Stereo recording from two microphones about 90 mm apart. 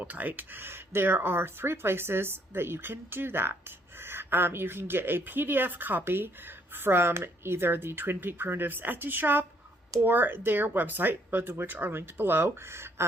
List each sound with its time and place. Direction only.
0.0 s speech: 20° right (ahead or behind)